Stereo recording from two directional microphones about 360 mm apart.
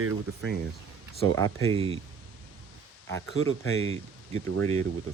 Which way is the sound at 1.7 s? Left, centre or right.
Centre.